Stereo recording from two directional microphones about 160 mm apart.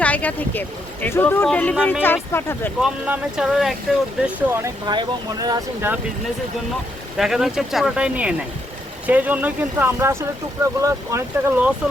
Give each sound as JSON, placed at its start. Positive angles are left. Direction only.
{"t": 0.0, "sound": "speech", "side_deg": 10}
{"t": 2.8, "sound": "speech", "side_deg": -5}
{"t": 4.4, "sound": "speech", "side_deg": -15}
{"t": 7.2, "sound": "speech", "side_deg": 0}